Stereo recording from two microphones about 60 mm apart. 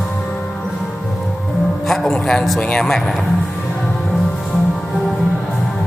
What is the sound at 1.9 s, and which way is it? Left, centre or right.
Music, centre.